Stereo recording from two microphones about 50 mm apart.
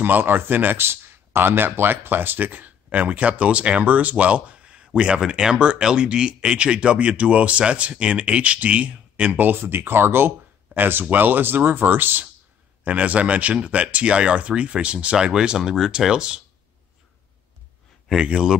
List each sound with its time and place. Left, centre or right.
0.0 s speech: right
9.5 s speech: right
12.8 s speech: right
18.2 s speech: centre